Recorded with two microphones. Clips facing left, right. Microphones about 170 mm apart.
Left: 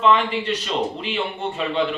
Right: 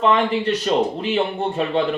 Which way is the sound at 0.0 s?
45° right (ahead or behind).